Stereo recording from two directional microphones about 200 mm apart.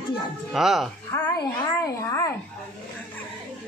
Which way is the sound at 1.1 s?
15° left (ahead or behind).